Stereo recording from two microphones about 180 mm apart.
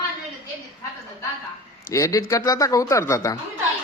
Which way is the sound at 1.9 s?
20° left (ahead or behind).